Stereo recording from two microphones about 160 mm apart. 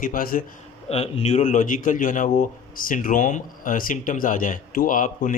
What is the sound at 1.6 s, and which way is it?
Speech, 55° left (ahead or behind).